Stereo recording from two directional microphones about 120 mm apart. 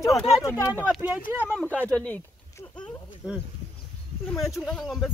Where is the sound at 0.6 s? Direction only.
20° left (ahead or behind).